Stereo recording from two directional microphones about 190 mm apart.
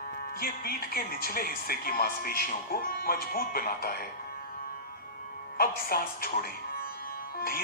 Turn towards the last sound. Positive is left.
turn(degrees=50)  # may be behind; listen again after turning